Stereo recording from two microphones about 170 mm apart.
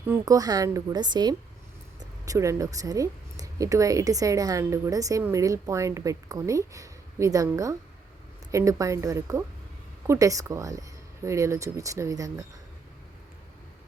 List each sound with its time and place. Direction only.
0.1 s speech: 20° right (ahead or behind)